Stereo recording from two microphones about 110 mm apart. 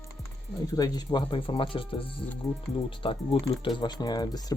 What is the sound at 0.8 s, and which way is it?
Speech, 40° left (ahead or behind).